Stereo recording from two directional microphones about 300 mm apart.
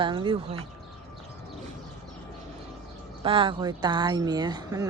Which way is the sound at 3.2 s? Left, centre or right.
Centre.